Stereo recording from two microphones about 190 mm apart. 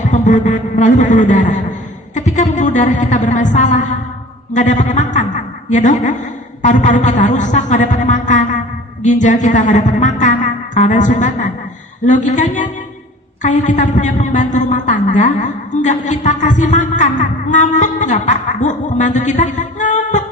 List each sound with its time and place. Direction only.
0.0 s a woman's voice: 40° left (ahead or behind)